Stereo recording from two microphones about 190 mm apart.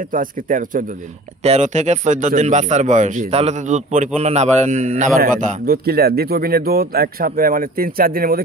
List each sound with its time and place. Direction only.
0.0 s a man's voice: 45° right (ahead or behind)